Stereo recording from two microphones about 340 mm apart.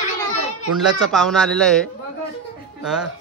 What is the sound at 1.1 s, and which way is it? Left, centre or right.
A man's voice, centre.